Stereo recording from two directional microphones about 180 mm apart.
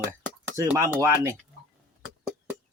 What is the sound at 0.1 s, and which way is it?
Speech, 15° right (ahead or behind).